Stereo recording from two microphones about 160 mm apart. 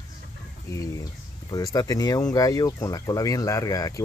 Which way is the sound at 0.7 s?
20° left (ahead or behind).